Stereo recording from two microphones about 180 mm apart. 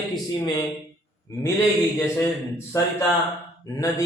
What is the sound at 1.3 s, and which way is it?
Speech, 15° left (ahead or behind).